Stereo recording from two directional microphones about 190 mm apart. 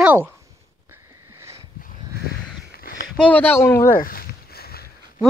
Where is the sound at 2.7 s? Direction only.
50° left (ahead or behind).